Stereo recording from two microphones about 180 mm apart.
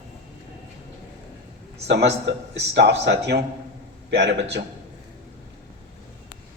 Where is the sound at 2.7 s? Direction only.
65° right (ahead or behind).